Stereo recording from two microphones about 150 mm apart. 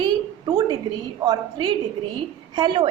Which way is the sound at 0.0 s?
30° right (ahead or behind).